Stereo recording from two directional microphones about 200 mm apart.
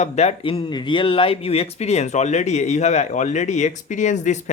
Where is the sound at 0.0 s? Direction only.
35° left (ahead or behind).